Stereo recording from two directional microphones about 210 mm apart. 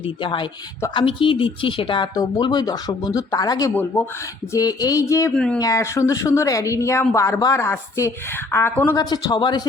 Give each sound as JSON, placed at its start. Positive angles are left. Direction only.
{"t": 0.2, "sound": "a woman's voice", "side_deg": 25}
{"t": 5.3, "sound": "speech", "side_deg": 5}
{"t": 5.5, "sound": "a woman's voice", "side_deg": 15}